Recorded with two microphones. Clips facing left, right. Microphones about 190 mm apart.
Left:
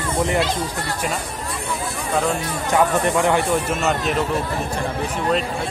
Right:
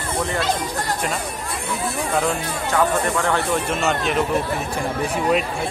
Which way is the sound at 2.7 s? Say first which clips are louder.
Left 2 dB; 15° left (ahead or behind).